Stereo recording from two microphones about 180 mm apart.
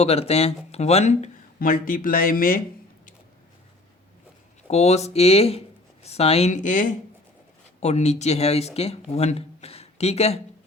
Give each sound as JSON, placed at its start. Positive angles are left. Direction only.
{"t": 0.0, "sound": "speech", "side_deg": 35}
{"t": 1.5, "sound": "speech", "side_deg": 50}
{"t": 4.7, "sound": "speech", "side_deg": 35}